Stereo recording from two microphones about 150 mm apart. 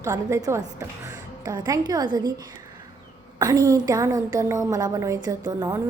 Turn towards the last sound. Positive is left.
turn(degrees=-25)  # may be behind; listen again after turning